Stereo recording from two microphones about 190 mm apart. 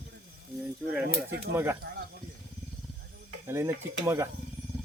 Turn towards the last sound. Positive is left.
turn(degrees=-15)  # may be behind; listen again after turning